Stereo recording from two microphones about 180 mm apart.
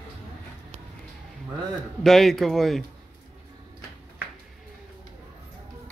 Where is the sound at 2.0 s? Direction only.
Centre (ahead or behind).